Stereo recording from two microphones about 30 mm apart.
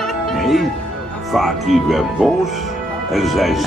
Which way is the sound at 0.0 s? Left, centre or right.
Centre.